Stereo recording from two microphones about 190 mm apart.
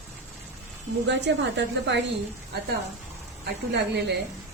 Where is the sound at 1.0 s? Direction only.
65° right (ahead or behind).